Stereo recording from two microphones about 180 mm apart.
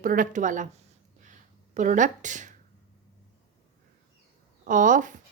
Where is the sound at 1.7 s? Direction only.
45° right (ahead or behind).